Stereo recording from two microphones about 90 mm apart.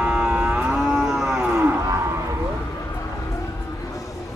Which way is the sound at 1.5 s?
20° right (ahead or behind).